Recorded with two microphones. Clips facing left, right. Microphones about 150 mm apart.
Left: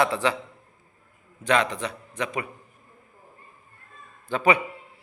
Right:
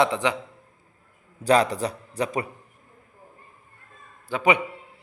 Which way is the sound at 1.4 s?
35° right (ahead or behind).